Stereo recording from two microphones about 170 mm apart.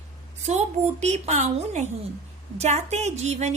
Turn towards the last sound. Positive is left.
turn(degrees=-40)  # may be behind; listen again after turning